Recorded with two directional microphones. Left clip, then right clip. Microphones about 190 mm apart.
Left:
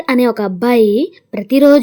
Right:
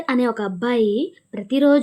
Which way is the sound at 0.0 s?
25° left (ahead or behind).